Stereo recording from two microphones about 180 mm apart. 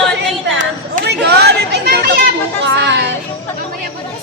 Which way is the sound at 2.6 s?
75° right (ahead or behind).